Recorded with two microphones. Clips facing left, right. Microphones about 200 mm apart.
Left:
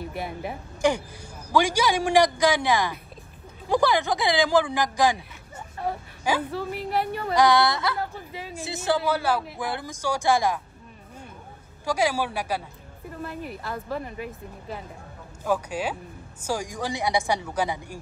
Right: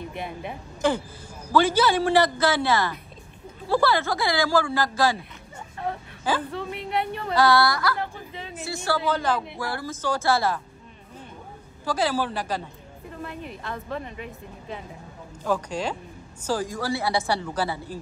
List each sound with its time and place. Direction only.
0.0 s a woman's voice: 5° left (ahead or behind)
11.8 s a woman's voice: 10° left (ahead or behind)